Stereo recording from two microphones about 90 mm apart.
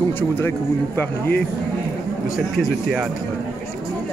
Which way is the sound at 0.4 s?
25° left (ahead or behind).